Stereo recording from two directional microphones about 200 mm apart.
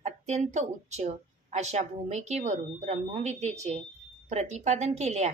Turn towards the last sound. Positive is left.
turn(degrees=-35)  # may be behind; listen again after turning